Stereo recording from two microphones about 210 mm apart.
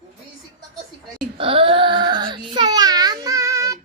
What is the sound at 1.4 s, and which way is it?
Baby cry, 25° right (ahead or behind).